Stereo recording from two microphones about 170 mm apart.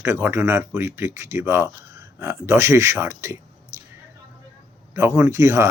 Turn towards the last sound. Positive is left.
turn(degrees=-15)  # may be behind; listen again after turning